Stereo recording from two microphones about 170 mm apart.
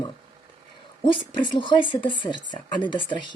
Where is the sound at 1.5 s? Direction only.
30° left (ahead or behind).